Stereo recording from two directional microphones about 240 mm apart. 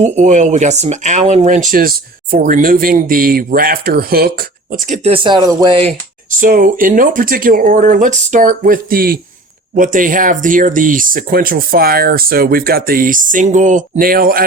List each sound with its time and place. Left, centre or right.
0.0 s speech: right
6.3 s speech: right